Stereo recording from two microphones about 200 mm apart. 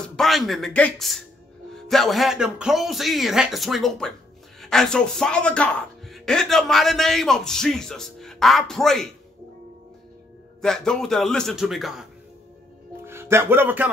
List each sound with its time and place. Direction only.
0.1 s a man's voice: centre (ahead or behind)
10.6 s speech: 5° left (ahead or behind)
13.0 s speech: 10° right (ahead or behind)